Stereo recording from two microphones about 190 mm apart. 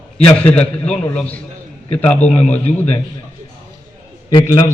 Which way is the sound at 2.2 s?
35° left (ahead or behind).